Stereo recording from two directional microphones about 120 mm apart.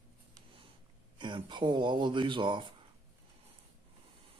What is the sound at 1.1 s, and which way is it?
Speech, 40° right (ahead or behind).